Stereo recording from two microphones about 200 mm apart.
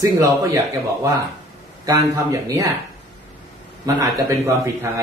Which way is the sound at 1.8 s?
20° right (ahead or behind).